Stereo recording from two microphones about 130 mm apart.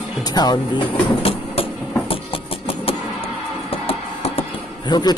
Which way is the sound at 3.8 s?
50° left (ahead or behind).